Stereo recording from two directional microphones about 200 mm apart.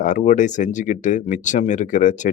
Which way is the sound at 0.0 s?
40° left (ahead or behind).